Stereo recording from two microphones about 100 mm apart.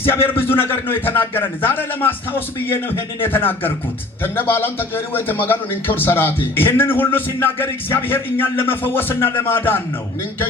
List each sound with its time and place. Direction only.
0.1 s a man's voice: 25° left (ahead or behind)